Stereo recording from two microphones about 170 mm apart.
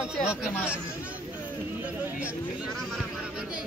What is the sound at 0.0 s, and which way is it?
Speech, 5° right (ahead or behind).